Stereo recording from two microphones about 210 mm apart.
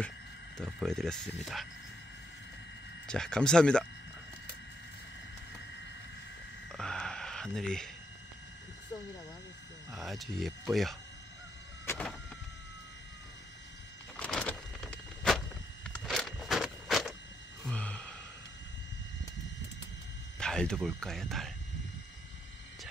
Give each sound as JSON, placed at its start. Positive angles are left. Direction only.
{"t": 0.6, "sound": "speech", "side_deg": 0}
{"t": 3.1, "sound": "speech", "side_deg": 5}
{"t": 6.7, "sound": "a sound", "side_deg": 5}
{"t": 9.9, "sound": "speech", "side_deg": 0}
{"t": 11.8, "sound": "vehicle", "side_deg": 10}
{"t": 14.1, "sound": "vehicle", "side_deg": 5}
{"t": 17.6, "sound": "sigh", "side_deg": 5}
{"t": 20.3, "sound": "speech", "side_deg": 5}